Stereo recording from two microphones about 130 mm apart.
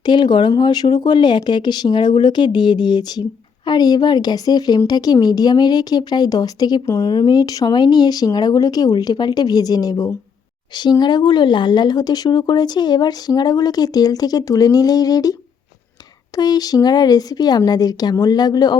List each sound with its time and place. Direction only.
0.0 s speech: 35° left (ahead or behind)